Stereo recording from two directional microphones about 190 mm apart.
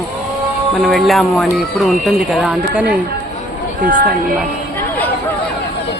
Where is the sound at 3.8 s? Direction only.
45° right (ahead or behind).